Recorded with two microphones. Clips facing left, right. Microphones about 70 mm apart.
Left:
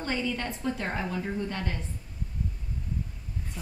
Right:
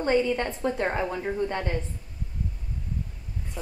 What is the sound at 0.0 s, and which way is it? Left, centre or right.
A woman's voice, right.